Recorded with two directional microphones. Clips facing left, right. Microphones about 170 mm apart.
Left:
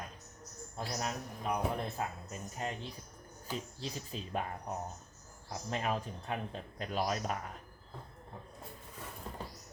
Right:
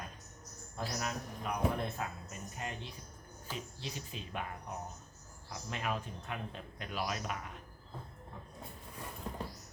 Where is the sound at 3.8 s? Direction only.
35° left (ahead or behind).